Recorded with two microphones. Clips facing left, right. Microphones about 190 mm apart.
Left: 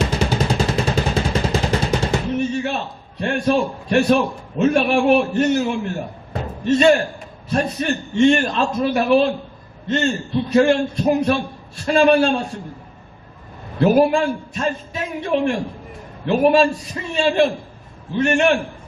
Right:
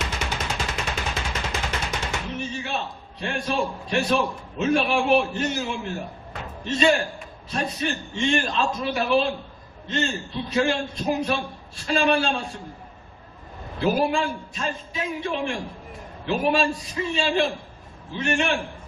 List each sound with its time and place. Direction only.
0.0 s vehicle: 35° left (ahead or behind)
2.3 s a man's voice: 55° left (ahead or behind)
10.5 s a man's voice: 55° left (ahead or behind)
13.7 s a man's voice: 55° left (ahead or behind)